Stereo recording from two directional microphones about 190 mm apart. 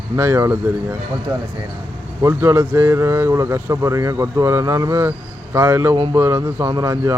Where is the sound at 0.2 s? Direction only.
10° right (ahead or behind).